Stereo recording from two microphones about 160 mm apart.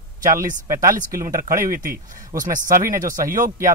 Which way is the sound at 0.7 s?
20° right (ahead or behind).